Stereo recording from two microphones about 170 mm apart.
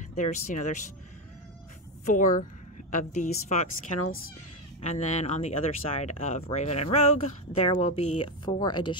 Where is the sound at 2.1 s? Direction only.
50° left (ahead or behind).